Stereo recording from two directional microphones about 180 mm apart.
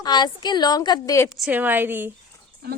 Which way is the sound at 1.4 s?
10° right (ahead or behind).